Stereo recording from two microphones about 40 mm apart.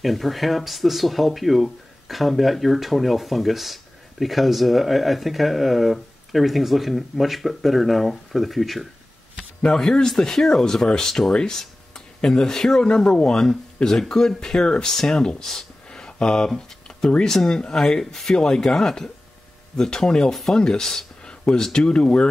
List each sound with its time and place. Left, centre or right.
0.0 s speech: centre
9.7 s speech: centre
15.9 s a sound: left
17.2 s speech: centre
21.2 s a sound: left
21.7 s speech: left